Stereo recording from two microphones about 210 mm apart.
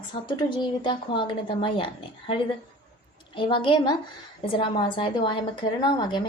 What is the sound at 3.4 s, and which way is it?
A woman's voice, 25° left (ahead or behind).